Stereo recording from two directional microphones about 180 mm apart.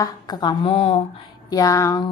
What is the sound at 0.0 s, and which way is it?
Speech, 25° left (ahead or behind).